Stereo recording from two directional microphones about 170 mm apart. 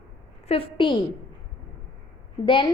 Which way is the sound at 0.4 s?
30° left (ahead or behind).